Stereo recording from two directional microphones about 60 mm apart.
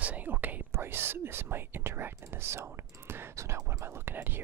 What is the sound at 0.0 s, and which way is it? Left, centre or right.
Whispering, right.